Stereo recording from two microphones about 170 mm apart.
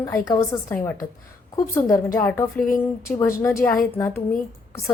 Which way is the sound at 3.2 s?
15° left (ahead or behind).